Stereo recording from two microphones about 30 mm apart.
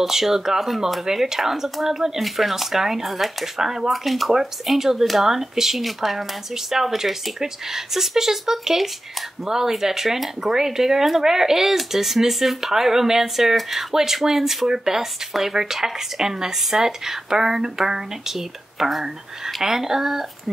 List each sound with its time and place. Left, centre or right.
0.0 s speech: centre
2.2 s speech: centre
3.5 s speech: centre
3.9 s speech: centre
4.6 s speech: centre